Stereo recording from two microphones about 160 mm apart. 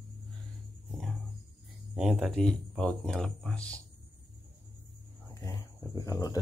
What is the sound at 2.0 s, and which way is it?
Speech, 5° right (ahead or behind).